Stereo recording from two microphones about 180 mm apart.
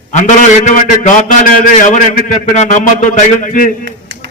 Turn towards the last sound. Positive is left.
turn(degrees=45)  # may be behind; listen again after turning